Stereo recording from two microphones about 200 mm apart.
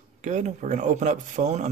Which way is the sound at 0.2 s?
35° right (ahead or behind).